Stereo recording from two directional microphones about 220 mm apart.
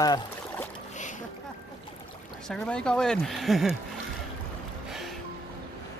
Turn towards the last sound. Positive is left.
turn(degrees=0)  # may be behind; listen again after turning